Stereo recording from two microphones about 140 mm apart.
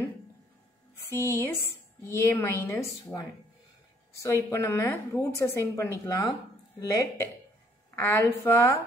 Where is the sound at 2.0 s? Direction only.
20° left (ahead or behind).